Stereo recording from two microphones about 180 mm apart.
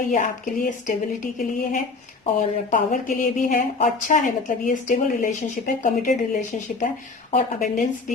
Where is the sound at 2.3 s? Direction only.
45° left (ahead or behind).